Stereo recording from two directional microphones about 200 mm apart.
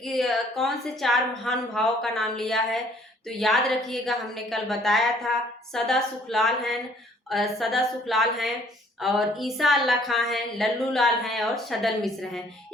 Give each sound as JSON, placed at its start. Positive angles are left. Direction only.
{"t": 0.0, "sound": "a woman's voice", "side_deg": 0}